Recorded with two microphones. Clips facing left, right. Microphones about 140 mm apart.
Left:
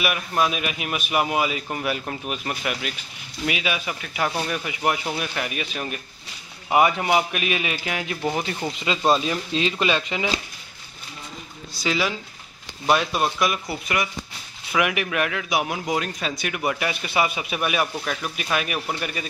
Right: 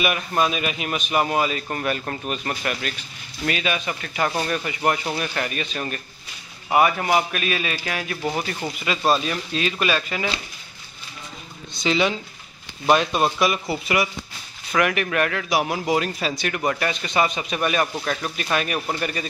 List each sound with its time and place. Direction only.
0.0 s a man's voice: 5° left (ahead or behind)
11.8 s a man's voice: 5° left (ahead or behind)